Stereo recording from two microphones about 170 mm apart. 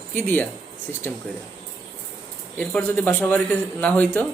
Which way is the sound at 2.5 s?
10° left (ahead or behind).